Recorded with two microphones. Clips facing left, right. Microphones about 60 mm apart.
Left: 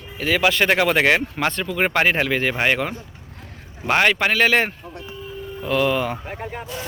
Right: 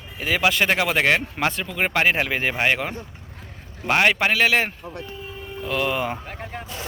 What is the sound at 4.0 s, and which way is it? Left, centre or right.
Speech, centre.